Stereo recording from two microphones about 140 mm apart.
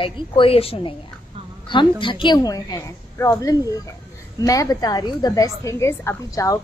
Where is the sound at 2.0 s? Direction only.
35° left (ahead or behind).